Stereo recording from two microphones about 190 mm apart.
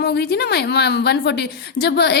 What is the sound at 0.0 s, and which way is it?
A woman's voice, 60° left (ahead or behind).